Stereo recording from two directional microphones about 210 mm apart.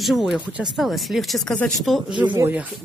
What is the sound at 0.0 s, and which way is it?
Speech, centre (ahead or behind).